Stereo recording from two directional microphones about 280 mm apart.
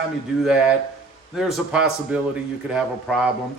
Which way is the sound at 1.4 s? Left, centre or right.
Centre.